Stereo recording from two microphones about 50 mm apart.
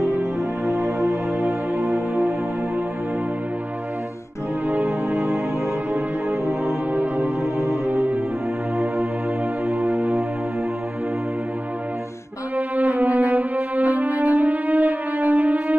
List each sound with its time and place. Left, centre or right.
0.7 s music: centre
4.6 s music: right
6.9 s music: right
9.7 s music: centre
12.5 s music: right